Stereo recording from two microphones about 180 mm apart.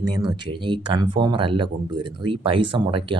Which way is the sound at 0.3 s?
25° right (ahead or behind).